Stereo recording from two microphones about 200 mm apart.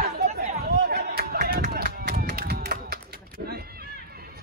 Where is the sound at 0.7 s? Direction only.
50° right (ahead or behind).